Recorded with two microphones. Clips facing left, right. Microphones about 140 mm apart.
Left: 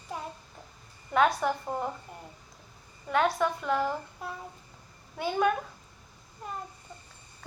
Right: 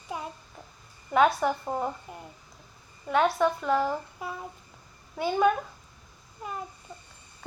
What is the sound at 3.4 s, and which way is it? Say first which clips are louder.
Speech: right 3 dB; centre (ahead or behind).